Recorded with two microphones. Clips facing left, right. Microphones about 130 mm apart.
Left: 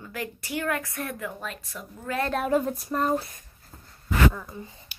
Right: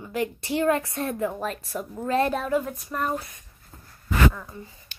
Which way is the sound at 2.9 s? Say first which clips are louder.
Left 3 dB; 30° left (ahead or behind).